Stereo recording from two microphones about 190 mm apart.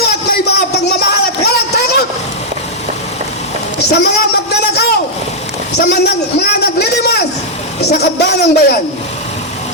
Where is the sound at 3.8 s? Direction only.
60° left (ahead or behind).